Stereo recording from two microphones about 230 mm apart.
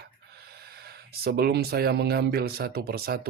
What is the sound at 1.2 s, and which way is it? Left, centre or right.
Speech, right.